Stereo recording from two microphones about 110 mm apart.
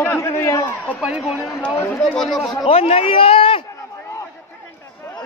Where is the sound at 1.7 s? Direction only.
25° left (ahead or behind).